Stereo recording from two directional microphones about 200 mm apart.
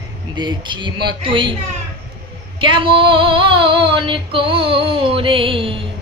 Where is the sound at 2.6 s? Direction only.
25° right (ahead or behind).